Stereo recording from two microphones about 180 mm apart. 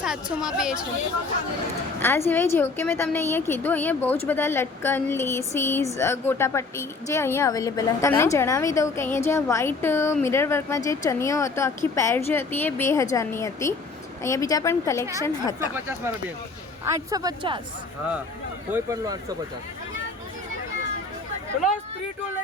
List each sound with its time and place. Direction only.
0.0 s a woman's voice: 5° right (ahead or behind)
2.0 s a woman's voice: 15° left (ahead or behind)
15.7 s speech: 15° right (ahead or behind)
18.7 s speech: 20° right (ahead or behind)